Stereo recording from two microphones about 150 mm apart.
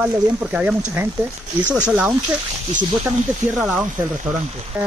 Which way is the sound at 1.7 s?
10° right (ahead or behind).